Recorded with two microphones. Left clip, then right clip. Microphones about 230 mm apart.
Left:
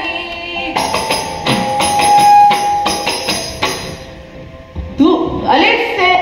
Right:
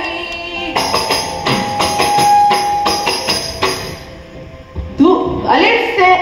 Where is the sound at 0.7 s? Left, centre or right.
Left.